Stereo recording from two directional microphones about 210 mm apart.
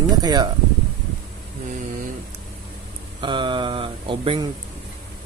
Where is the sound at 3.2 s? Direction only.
20° right (ahead or behind).